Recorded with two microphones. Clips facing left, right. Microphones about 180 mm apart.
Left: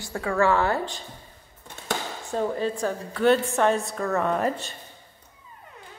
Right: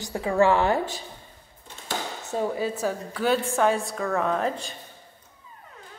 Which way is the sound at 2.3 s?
10° right (ahead or behind).